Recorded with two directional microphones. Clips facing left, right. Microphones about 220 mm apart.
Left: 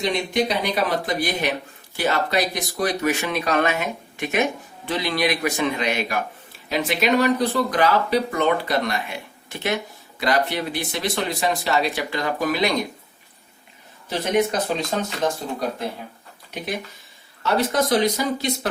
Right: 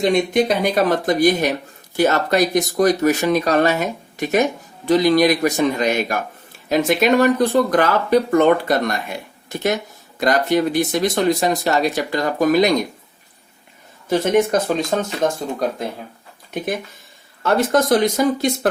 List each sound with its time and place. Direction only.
0.0 s speech: 50° right (ahead or behind)
14.1 s speech: 45° right (ahead or behind)
17.4 s speech: 50° right (ahead or behind)